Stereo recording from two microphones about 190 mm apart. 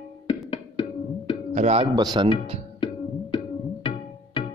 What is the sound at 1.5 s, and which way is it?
Speech, 35° right (ahead or behind).